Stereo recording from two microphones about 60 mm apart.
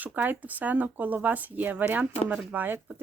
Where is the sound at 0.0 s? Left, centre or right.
Right.